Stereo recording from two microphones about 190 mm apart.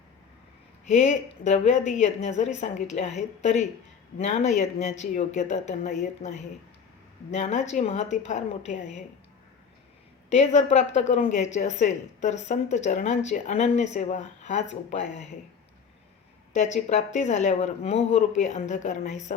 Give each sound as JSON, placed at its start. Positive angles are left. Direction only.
{"t": 0.9, "sound": "a woman's voice", "side_deg": 35}
{"t": 10.2, "sound": "a woman's voice", "side_deg": 35}
{"t": 16.5, "sound": "a woman's voice", "side_deg": 40}